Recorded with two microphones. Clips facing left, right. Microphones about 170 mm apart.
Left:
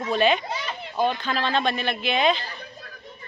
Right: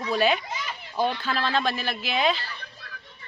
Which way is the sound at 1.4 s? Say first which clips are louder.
Left 3 dB; centre (ahead or behind).